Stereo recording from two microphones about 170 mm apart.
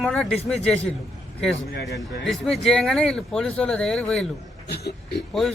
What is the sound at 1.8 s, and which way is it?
Speech, centre (ahead or behind).